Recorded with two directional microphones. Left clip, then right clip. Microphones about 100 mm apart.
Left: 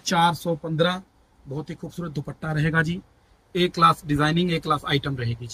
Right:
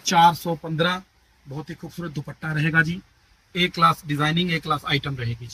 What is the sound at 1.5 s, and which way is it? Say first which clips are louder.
Speech: left 1 dB; 15° left (ahead or behind).